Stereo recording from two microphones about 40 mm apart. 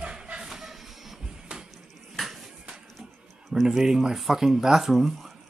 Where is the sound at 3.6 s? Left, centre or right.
Centre.